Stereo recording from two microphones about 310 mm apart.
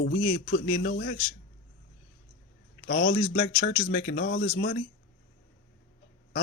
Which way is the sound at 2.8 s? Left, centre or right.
Left.